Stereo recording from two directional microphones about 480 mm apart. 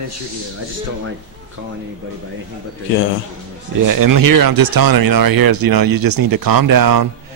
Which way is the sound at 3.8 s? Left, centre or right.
Right.